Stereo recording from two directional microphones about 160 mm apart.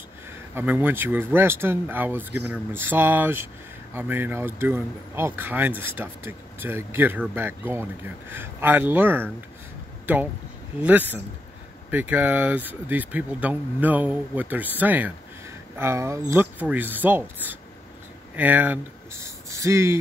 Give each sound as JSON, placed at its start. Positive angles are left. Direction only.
{"t": 0.6, "sound": "speech", "side_deg": -15}